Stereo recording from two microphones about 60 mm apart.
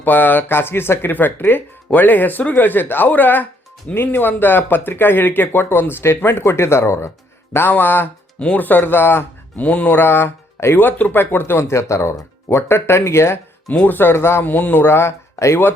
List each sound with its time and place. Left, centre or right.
0.0 s speech: left
7.5 s speech: left
8.4 s speech: centre
8.6 s speech: left
9.6 s speech: left
11.7 s speech: left
13.7 s speech: left
14.4 s speech: left